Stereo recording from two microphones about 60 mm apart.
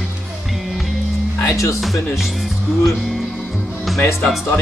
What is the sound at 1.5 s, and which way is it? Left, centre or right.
Speech, left.